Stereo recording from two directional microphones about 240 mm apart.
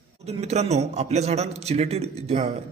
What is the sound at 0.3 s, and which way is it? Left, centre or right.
A man's voice, right.